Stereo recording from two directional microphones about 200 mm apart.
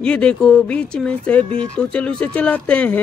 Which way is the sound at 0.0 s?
5° left (ahead or behind).